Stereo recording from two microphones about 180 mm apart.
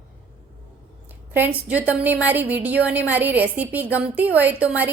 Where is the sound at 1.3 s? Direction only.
10° right (ahead or behind).